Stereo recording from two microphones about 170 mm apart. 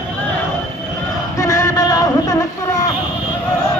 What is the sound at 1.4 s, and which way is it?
Music, 15° left (ahead or behind).